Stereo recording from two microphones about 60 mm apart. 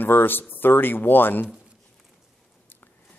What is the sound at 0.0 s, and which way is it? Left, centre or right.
A man's voice, left.